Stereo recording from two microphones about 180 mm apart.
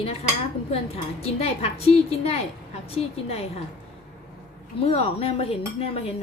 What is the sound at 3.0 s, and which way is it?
Speech, 35° left (ahead or behind).